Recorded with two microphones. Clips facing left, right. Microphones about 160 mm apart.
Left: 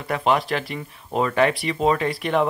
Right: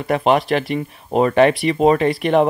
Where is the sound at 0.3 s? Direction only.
65° right (ahead or behind).